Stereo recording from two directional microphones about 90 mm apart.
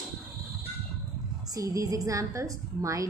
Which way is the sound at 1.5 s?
40° right (ahead or behind).